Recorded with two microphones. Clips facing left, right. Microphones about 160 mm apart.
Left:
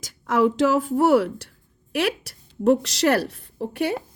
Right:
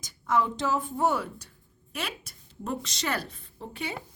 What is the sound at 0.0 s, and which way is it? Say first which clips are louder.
A woman's voice: left 7 dB; 90° left.